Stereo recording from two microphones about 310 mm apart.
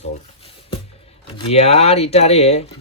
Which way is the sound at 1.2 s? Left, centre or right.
Centre.